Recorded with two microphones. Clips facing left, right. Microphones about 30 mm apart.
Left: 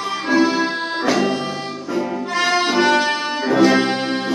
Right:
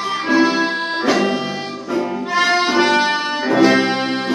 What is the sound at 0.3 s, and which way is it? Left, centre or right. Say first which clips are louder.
Music: right 1 dB; centre.